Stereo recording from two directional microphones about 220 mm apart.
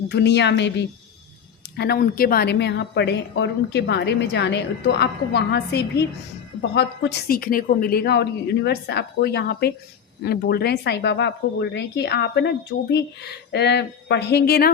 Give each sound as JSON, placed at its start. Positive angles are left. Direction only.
{"t": 0.1, "sound": "a woman's voice", "side_deg": 50}